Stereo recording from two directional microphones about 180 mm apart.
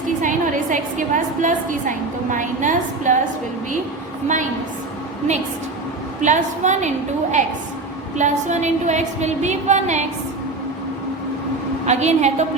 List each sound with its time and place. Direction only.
0.2 s a woman's voice: 45° right (ahead or behind)
6.2 s a woman's voice: 40° right (ahead or behind)
11.9 s a woman's voice: 40° right (ahead or behind)